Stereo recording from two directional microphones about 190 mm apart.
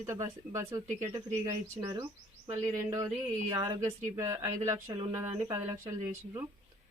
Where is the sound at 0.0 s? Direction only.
15° right (ahead or behind).